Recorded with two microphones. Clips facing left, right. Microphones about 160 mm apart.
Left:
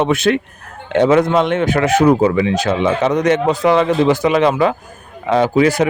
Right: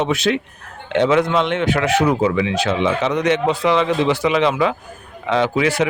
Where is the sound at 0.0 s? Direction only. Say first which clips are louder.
Left 4 dB; 55° left (ahead or behind).